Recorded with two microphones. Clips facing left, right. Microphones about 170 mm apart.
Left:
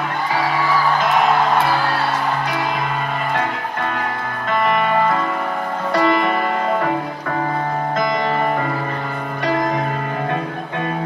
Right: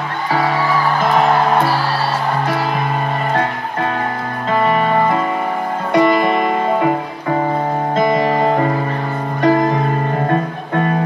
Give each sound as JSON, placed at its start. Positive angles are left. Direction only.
{"t": 4.5, "sound": "music", "side_deg": -30}
{"t": 5.9, "sound": "music", "side_deg": -15}
{"t": 7.9, "sound": "music", "side_deg": -30}